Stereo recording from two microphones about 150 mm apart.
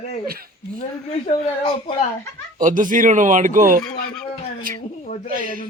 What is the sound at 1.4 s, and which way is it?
Speech, 35° left (ahead or behind).